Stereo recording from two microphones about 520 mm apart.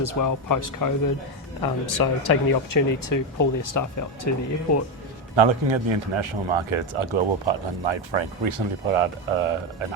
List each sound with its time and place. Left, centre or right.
0.0 s speech: left
5.4 s a man's voice: right